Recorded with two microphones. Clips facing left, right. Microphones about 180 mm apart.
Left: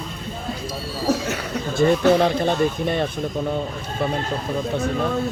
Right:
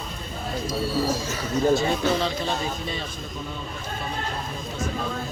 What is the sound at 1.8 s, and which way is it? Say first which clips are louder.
Speech: left 7 dB; 55° left (ahead or behind).